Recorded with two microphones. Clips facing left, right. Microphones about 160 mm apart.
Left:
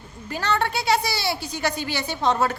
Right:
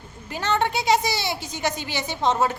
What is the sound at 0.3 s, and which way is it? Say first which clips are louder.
A woman's voice: right 1 dB; 20° right (ahead or behind).